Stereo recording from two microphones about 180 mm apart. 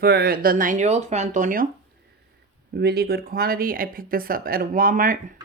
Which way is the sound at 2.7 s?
60° right (ahead or behind).